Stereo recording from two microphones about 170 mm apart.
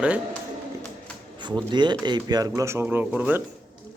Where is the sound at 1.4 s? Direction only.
25° right (ahead or behind); by 3.4 s 10° right (ahead or behind).